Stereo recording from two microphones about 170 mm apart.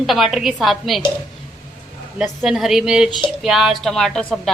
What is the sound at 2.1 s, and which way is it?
A woman's voice, 5° right (ahead or behind).